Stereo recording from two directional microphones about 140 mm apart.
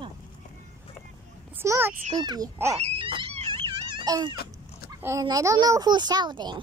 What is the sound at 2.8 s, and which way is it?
Wail, 45° right (ahead or behind).